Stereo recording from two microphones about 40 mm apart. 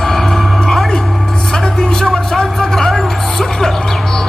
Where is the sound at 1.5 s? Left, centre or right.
Centre.